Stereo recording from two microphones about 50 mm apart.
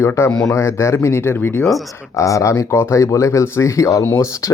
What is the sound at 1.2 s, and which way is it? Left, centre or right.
Speech, left.